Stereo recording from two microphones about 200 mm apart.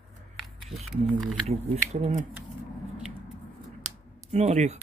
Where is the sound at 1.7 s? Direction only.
35° right (ahead or behind).